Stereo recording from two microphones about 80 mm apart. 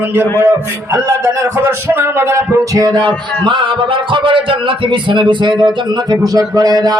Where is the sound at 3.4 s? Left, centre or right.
Right.